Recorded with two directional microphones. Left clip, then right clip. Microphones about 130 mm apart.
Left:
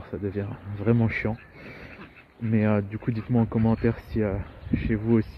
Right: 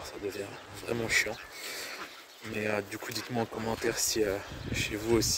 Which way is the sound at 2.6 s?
35° right (ahead or behind).